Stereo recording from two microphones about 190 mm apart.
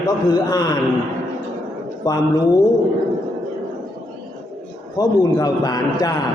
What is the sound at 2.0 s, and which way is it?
Speech, 20° left (ahead or behind).